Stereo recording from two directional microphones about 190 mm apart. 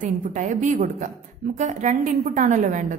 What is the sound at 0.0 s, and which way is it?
A woman's voice, 40° right (ahead or behind).